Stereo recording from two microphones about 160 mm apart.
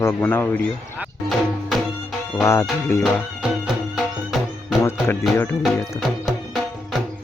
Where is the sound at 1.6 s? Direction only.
Centre (ahead or behind).